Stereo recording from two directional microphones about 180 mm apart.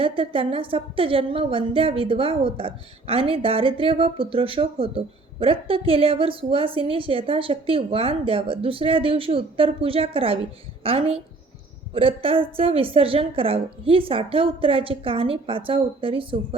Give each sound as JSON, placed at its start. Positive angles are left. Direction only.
{"t": 0.0, "sound": "a woman's voice", "side_deg": -30}